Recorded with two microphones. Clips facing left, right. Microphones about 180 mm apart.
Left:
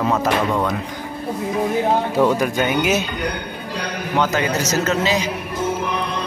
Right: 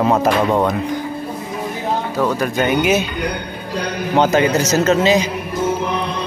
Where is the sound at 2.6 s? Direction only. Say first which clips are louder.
Right 6 dB; centre (ahead or behind).